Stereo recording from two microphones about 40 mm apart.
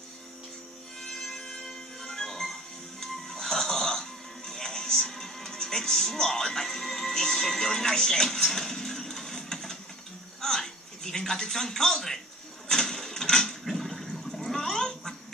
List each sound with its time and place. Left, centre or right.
1.0 s music: centre
10.4 s a man's voice: centre
12.6 s sewing machine: centre
13.7 s toilet flush: centre